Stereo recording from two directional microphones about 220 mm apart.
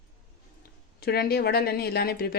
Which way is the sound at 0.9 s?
45° left (ahead or behind).